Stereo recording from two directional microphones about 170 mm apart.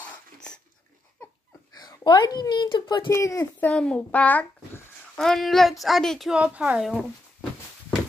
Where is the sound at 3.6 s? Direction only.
5° left (ahead or behind).